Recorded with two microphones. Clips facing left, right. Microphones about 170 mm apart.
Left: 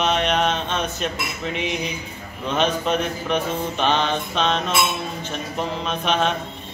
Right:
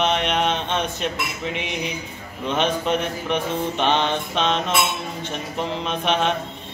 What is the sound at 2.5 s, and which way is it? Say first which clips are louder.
Speech: even; 15° right (ahead or behind).